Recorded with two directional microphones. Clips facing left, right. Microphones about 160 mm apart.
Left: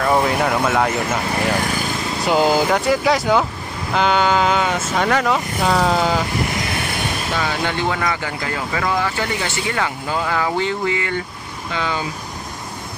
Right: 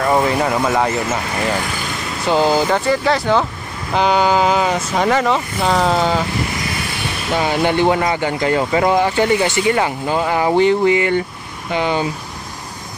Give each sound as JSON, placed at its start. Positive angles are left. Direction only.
{"t": 0.0, "sound": "speech", "side_deg": 0}
{"t": 2.3, "sound": "speech", "side_deg": 5}
{"t": 7.3, "sound": "speech", "side_deg": -20}